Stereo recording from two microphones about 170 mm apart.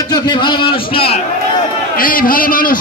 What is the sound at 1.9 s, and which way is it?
Speech, 55° left (ahead or behind).